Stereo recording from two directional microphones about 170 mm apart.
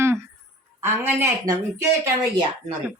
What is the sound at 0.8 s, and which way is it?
Speech, 15° right (ahead or behind).